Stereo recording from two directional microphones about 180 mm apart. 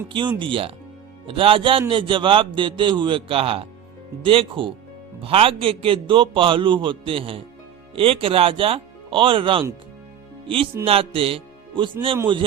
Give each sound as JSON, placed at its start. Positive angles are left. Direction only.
{"t": 0.1, "sound": "a man's voice", "side_deg": -25}